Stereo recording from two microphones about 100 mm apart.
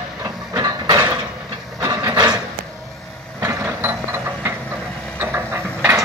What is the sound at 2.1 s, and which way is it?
Dog, 40° right (ahead or behind).